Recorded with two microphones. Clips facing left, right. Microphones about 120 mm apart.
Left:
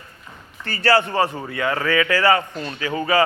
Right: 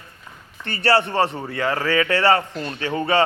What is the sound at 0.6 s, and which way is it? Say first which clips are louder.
A man's voice: left 1 dB; 25° right (ahead or behind).